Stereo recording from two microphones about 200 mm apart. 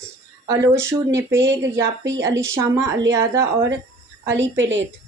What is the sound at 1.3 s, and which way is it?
Speech, 65° right (ahead or behind).